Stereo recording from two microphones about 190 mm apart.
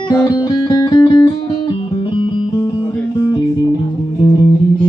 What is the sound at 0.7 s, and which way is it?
Music, 25° left (ahead or behind).